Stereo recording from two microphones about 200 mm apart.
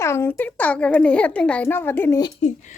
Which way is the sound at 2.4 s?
35° left (ahead or behind).